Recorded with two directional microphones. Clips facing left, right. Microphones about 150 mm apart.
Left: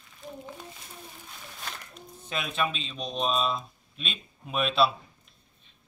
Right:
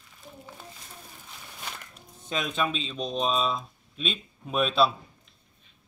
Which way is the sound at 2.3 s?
5° left (ahead or behind).